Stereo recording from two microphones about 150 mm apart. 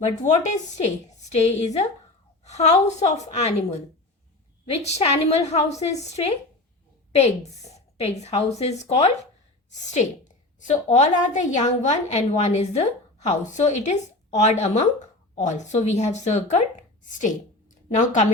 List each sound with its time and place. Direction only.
0.0 s a woman's voice: 50° left (ahead or behind)
4.8 s a woman's voice: 45° left (ahead or behind)
7.7 s a sound: 45° left (ahead or behind)
8.2 s a woman's voice: 45° left (ahead or behind)